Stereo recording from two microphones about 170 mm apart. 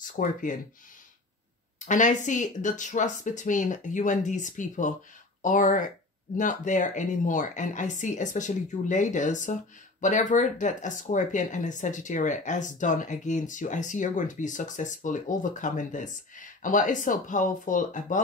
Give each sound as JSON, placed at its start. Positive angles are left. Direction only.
{"t": 0.0, "sound": "speech", "side_deg": 50}
{"t": 1.9, "sound": "speech", "side_deg": 45}